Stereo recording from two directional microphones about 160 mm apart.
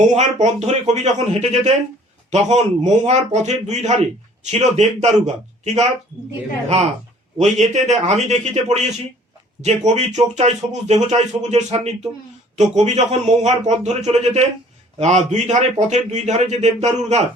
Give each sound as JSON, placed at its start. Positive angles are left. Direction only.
{"t": 0.2, "sound": "a man's voice", "side_deg": -45}
{"t": 7.3, "sound": "a man's voice", "side_deg": -45}